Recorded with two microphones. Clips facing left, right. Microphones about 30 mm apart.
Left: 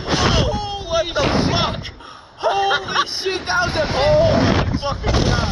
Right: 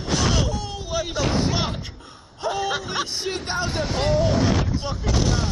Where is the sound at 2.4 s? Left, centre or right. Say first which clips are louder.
Left 7 dB; left.